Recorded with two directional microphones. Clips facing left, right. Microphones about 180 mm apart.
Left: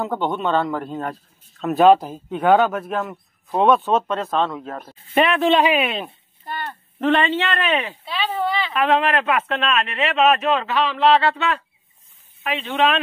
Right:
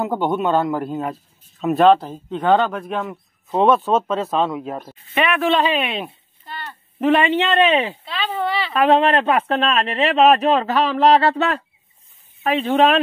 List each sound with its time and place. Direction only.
0.0 s speech: 10° right (ahead or behind)
5.1 s speech: 30° left (ahead or behind)
5.4 s speech: 15° left (ahead or behind)
5.9 s speech: 5° right (ahead or behind)
6.4 s a sound: 55° left (ahead or behind)
7.0 s speech: 10° right (ahead or behind); by 8.0 s 30° right (ahead or behind)
8.0 s speech: 10° left (ahead or behind)
9.0 s speech: 30° right (ahead or behind)